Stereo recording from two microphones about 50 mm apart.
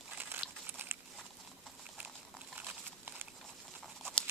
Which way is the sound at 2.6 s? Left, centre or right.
Right.